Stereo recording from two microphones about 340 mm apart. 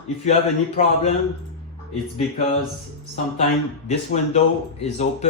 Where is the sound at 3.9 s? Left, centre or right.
Centre.